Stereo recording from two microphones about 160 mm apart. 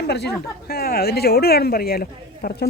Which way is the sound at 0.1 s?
90° left.